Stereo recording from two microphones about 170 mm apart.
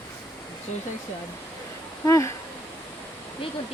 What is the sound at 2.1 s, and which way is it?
Speech, 15° left (ahead or behind).